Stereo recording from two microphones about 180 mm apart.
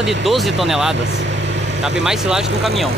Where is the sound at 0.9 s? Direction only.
80° right.